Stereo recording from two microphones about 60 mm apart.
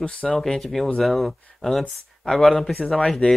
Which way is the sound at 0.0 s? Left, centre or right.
Centre.